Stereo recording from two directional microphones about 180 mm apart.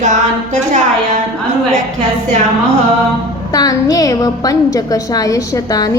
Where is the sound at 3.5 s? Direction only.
20° left (ahead or behind).